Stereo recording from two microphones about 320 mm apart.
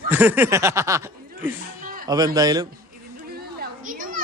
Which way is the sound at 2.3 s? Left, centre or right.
Centre.